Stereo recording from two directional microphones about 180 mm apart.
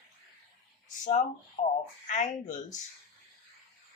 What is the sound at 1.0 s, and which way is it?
Speech, 45° left (ahead or behind).